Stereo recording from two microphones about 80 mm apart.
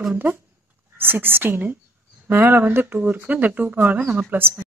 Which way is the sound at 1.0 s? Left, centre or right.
Right.